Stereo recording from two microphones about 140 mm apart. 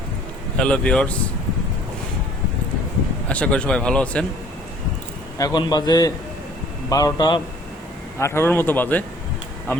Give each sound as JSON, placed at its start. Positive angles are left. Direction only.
{"t": 0.6, "sound": "a man's voice", "side_deg": 5}
{"t": 3.2, "sound": "a man's voice", "side_deg": 10}
{"t": 5.4, "sound": "a man's voice", "side_deg": 30}
{"t": 8.2, "sound": "a man's voice", "side_deg": 15}